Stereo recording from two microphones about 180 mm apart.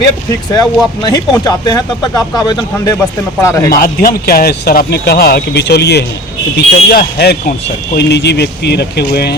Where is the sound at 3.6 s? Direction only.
55° left (ahead or behind).